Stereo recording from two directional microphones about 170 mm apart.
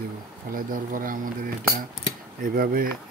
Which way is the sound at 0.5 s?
55° right (ahead or behind).